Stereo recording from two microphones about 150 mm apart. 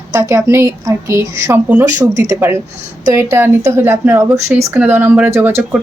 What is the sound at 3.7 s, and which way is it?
Speech, 15° right (ahead or behind).